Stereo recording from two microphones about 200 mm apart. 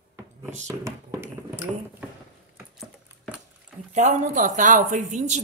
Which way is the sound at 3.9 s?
35° right (ahead or behind).